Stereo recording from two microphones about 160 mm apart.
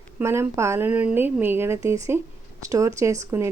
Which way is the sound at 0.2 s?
15° right (ahead or behind).